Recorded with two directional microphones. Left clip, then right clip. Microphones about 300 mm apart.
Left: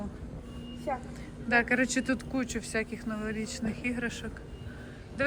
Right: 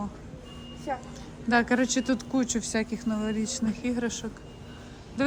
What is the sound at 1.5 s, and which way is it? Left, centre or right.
Speech, centre.